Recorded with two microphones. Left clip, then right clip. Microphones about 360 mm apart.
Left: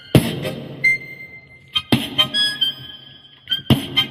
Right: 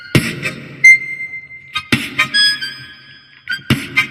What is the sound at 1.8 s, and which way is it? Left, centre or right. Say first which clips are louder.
Harmonica: right 3 dB; left.